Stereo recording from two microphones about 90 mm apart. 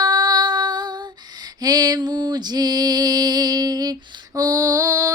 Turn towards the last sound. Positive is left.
turn(degrees=-40)  # may be behind; listen again after turning